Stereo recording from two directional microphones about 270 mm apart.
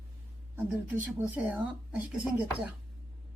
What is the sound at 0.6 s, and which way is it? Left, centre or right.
Speech, centre.